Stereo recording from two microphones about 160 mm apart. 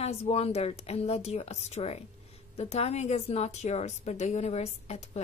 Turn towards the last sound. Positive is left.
turn(degrees=40)  # may be behind; listen again after turning